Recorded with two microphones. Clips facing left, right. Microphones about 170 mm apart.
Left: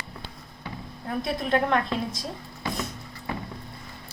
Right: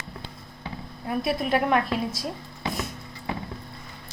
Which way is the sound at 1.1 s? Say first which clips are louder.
Right 1 dB; 10° right (ahead or behind).